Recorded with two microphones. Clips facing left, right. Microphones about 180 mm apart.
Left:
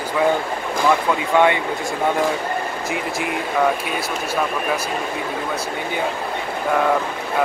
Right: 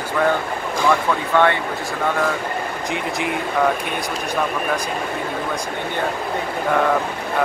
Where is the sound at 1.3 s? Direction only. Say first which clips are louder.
Left 1 dB; 15° left (ahead or behind).